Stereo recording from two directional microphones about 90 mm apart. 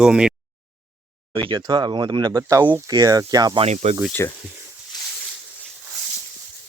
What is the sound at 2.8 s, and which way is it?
Speech, 40° right (ahead or behind).